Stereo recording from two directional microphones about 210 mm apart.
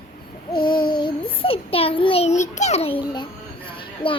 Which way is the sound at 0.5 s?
20° left (ahead or behind).